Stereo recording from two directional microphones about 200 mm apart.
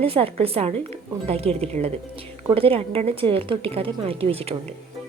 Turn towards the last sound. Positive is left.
turn(degrees=-30)  # may be behind; listen again after turning